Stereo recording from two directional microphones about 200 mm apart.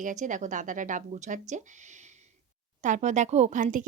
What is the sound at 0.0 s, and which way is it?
Speech, 40° right (ahead or behind).